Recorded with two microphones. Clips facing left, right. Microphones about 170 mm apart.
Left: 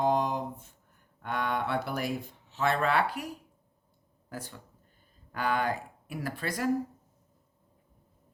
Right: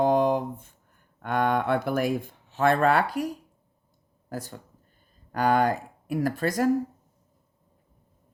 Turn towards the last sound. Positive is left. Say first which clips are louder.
# right 8 dB
turn(degrees=-45)  # may be behind; listen again after turning